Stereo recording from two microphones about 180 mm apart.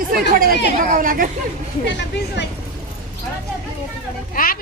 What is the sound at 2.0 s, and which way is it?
Speech, 70° left (ahead or behind).